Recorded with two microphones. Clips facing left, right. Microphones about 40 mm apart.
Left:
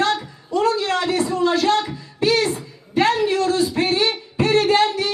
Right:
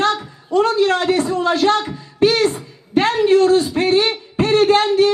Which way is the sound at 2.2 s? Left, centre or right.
Right.